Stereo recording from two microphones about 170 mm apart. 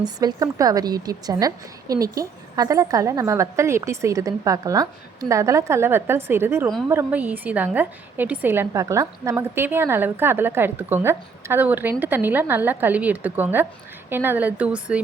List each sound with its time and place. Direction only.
0.0 s a woman's voice: 25° right (ahead or behind); by 15.0 s 5° right (ahead or behind)